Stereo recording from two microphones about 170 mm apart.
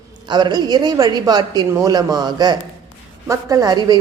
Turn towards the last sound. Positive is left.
turn(degrees=-25)  # may be behind; listen again after turning